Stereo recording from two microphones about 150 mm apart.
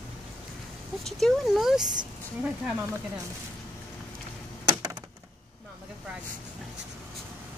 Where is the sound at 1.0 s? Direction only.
Centre (ahead or behind).